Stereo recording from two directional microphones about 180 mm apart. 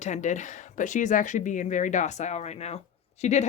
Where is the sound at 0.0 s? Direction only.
40° left (ahead or behind).